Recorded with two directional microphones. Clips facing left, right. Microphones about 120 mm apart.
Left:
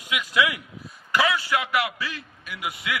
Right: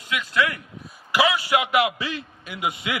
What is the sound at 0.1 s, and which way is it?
Speech, 15° left (ahead or behind).